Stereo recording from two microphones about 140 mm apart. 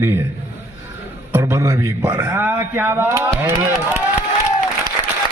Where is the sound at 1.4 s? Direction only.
20° right (ahead or behind).